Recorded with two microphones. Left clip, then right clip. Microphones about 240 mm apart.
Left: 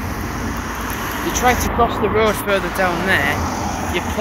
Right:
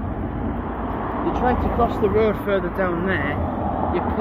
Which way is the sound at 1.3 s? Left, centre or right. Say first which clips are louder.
Left 6 dB; centre.